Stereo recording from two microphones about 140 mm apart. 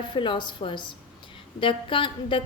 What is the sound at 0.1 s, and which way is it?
A woman's voice, 35° left (ahead or behind).